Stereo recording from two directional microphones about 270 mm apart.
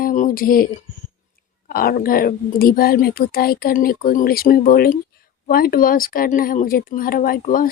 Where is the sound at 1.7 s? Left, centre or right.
Left.